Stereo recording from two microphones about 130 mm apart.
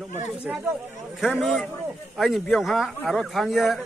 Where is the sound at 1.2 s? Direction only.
5° right (ahead or behind).